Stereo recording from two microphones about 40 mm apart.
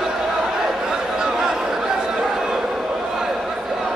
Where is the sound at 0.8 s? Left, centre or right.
Centre.